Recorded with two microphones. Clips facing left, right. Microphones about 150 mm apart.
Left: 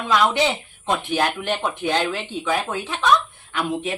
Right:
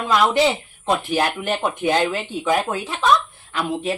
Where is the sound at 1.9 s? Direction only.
40° right (ahead or behind).